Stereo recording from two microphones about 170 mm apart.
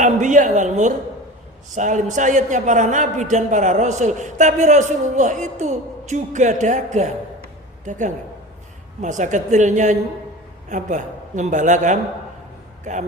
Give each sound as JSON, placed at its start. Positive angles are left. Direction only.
{"t": 0.0, "sound": "a man's voice", "side_deg": -45}